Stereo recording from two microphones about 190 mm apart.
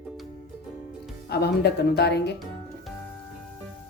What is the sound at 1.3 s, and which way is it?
Speech, 60° left (ahead or behind).